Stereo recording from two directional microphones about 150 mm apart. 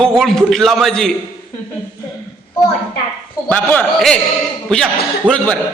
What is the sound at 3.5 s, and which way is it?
Speech, 10° left (ahead or behind).